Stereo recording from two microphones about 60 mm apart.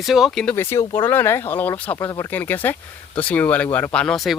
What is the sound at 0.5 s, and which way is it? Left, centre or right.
Speech, left.